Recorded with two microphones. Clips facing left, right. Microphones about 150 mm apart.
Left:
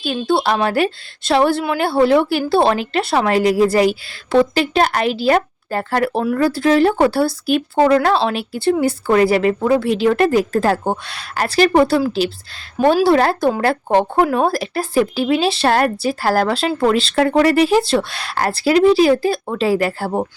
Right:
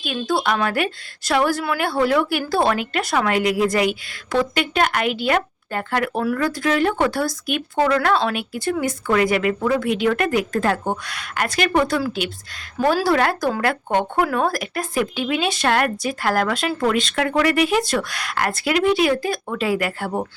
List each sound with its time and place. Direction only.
0.0 s a woman's voice: 30° left (ahead or behind)